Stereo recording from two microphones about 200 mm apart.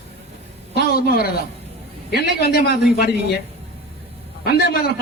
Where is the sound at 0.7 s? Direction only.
50° left (ahead or behind).